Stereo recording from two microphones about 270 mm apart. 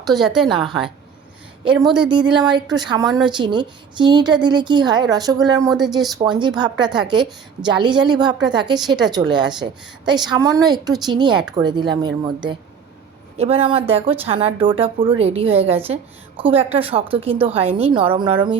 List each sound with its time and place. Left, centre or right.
0.0 s a woman's voice: centre
1.6 s a woman's voice: centre
13.3 s a woman's voice: right